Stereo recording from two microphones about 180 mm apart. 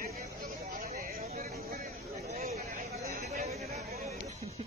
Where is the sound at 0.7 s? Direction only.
50° right (ahead or behind).